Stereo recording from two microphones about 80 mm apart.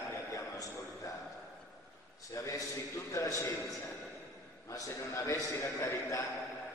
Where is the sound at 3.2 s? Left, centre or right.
Left.